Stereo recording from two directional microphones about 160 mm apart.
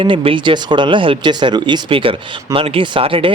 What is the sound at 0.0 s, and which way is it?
Speech, 35° right (ahead or behind).